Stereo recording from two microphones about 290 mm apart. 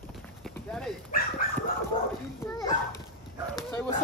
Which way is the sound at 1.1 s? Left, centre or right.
Left.